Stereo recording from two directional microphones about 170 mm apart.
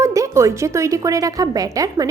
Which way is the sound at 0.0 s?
20° right (ahead or behind).